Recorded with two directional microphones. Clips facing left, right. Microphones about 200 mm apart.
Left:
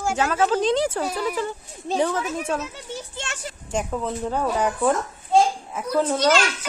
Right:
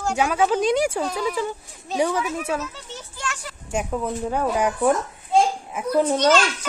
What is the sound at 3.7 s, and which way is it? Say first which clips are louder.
A woman's voice: right 1 dB; 10° right (ahead or behind).